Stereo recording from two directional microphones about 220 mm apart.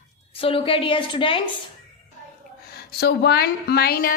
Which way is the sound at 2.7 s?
45° left (ahead or behind).